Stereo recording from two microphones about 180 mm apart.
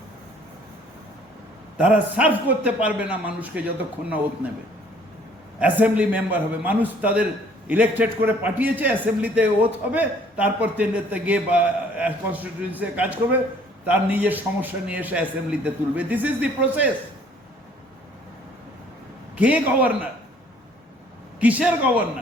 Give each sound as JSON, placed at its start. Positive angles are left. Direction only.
{"t": 1.8, "sound": "a man's voice", "side_deg": -5}
{"t": 5.5, "sound": "a man's voice", "side_deg": -10}
{"t": 19.4, "sound": "a man's voice", "side_deg": -10}
{"t": 21.4, "sound": "a man's voice", "side_deg": -10}